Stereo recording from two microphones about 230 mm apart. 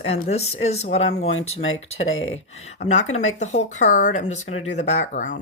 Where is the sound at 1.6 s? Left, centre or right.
Left.